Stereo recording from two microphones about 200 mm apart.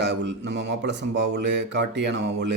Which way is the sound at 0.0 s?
60° right (ahead or behind).